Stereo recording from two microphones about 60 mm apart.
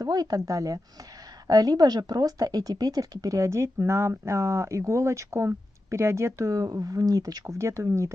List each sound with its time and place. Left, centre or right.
0.0 s speech: right
3.4 s speech: right
7.5 s speech: right